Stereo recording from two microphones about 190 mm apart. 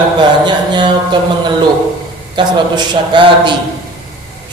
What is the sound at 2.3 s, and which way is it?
Speech, 25° right (ahead or behind).